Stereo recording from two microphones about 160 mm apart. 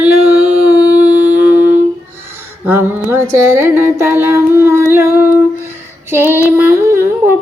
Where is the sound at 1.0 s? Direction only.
10° right (ahead or behind).